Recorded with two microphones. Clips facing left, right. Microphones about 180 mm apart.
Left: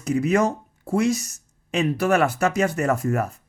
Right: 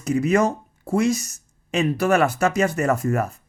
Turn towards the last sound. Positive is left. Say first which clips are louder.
# right 1 dB
turn(degrees=-45)  # may be behind; listen again after turning